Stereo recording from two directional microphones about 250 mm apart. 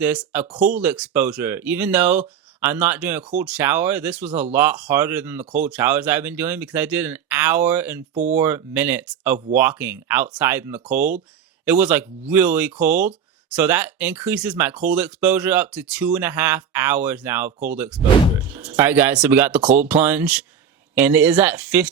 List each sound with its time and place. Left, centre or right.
0.0 s speech: centre
8.1 s speech: right
8.4 s speech: centre